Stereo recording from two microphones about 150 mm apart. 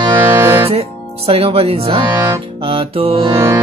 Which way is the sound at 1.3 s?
40° right (ahead or behind).